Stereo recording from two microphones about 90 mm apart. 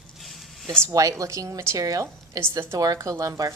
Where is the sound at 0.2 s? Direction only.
Centre (ahead or behind).